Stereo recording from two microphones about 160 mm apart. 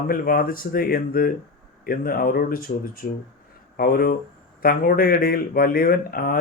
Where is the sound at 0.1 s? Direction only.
65° left (ahead or behind).